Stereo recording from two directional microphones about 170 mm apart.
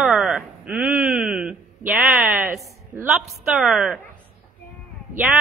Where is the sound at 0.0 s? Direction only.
5° right (ahead or behind).